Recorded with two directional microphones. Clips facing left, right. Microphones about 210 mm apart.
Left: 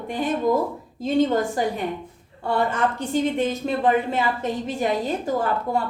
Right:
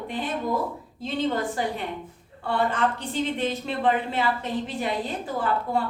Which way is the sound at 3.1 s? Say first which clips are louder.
Left 5 dB; 45° left (ahead or behind).